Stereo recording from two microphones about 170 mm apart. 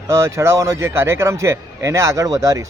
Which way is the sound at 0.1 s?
15° right (ahead or behind).